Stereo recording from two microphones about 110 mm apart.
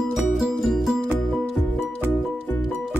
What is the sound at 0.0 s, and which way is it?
Music, centre (ahead or behind).